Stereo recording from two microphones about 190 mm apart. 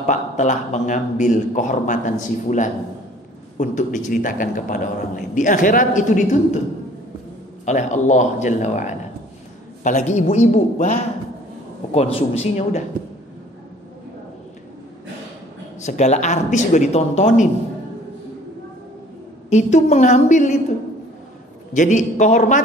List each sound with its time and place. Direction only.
0.0 s a man's voice: 40° left (ahead or behind)
7.6 s a man's voice: 40° left (ahead or behind)
15.8 s a man's voice: 35° left (ahead or behind)
19.5 s a man's voice: 40° left (ahead or behind)
21.7 s a man's voice: 40° left (ahead or behind)